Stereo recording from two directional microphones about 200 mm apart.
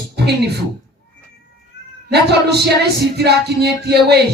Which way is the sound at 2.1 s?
55° right (ahead or behind).